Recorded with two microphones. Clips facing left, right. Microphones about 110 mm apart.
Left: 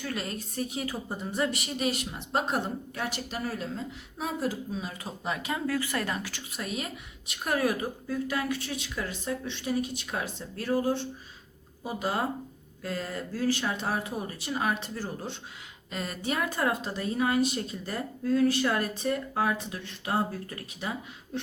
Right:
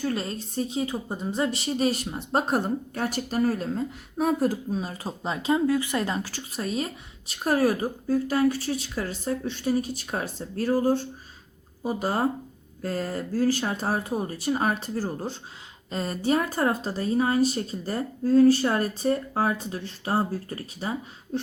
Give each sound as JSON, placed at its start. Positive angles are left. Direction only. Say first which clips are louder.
{"t": 0.0, "sound": "a woman's voice", "louder": "right 6 dB", "side_deg": -30}